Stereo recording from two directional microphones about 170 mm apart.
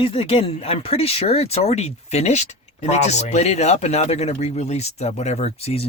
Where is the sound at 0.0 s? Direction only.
35° left (ahead or behind).